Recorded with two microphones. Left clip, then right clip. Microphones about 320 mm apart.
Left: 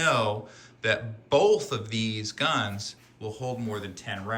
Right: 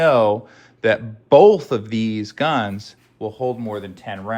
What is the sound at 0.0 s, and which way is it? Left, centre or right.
Speech, centre.